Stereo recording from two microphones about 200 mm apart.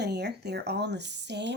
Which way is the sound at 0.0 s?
55° right (ahead or behind).